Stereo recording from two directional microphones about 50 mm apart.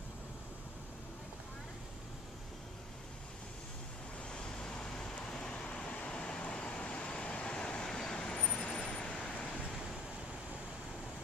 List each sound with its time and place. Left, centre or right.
4.3 s vehicle: centre